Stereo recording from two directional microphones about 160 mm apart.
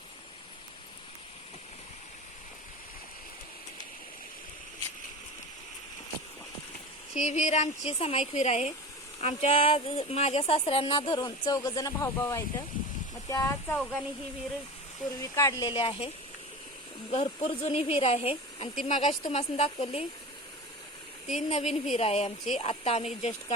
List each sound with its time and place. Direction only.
7.1 s speech: 45° left (ahead or behind); by 13.7 s 20° left (ahead or behind)
15.2 s speech: 20° left (ahead or behind)
17.1 s speech: 35° left (ahead or behind)
21.3 s speech: 45° left (ahead or behind)